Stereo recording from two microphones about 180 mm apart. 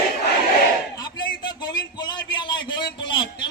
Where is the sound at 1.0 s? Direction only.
25° left (ahead or behind).